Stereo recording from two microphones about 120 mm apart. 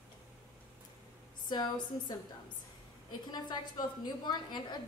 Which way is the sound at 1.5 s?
35° left (ahead or behind).